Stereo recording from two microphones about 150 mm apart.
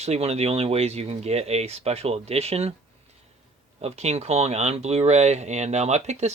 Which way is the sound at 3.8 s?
45° right (ahead or behind).